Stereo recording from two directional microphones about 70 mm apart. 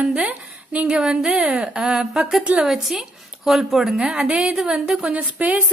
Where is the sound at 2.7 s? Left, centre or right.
Centre.